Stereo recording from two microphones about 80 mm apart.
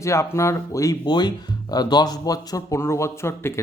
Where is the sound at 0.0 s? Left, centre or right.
Left.